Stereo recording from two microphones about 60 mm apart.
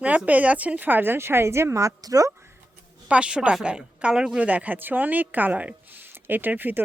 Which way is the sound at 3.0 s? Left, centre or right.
Centre.